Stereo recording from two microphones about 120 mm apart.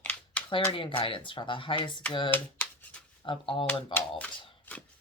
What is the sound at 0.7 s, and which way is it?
Speech, 45° left (ahead or behind).